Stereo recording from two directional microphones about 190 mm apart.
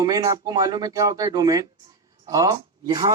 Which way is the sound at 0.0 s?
20° right (ahead or behind).